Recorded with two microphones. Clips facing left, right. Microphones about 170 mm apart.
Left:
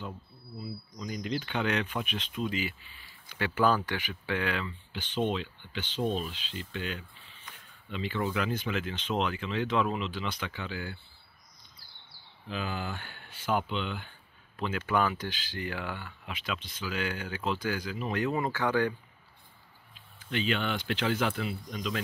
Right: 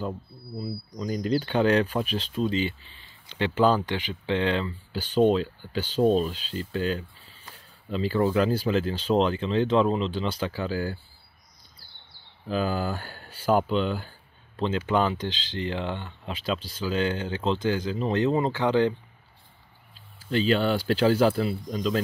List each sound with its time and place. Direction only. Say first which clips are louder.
0.6 s speech: right 7 dB; 35° right (ahead or behind)
11.8 s bird: right 2 dB; 30° right (ahead or behind)
12.4 s speech: right 9 dB; 40° right (ahead or behind)
14.6 s speech: right 5 dB; 25° right (ahead or behind)
20.2 s speech: right 8 dB; 35° right (ahead or behind)